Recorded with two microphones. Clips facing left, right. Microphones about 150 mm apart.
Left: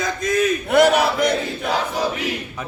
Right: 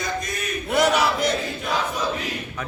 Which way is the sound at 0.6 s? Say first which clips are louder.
Left 3 dB; 60° left (ahead or behind).